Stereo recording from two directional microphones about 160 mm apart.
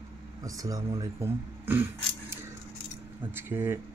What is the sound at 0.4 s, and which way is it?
Speech, 20° right (ahead or behind).